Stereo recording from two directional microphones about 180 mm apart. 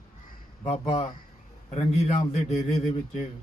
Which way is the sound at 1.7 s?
40° left (ahead or behind).